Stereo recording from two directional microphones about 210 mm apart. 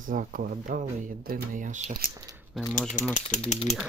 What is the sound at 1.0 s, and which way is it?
Speech, 40° right (ahead or behind).